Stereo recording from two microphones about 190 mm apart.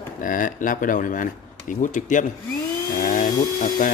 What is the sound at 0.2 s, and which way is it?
A man's voice, 45° left (ahead or behind).